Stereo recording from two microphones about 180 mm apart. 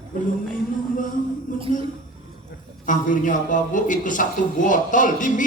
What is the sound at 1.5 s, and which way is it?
Speech, 45° left (ahead or behind).